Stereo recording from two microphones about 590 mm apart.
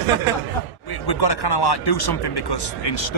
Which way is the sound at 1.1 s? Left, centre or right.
Left.